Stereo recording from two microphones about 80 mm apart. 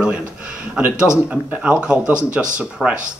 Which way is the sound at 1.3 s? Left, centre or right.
Centre.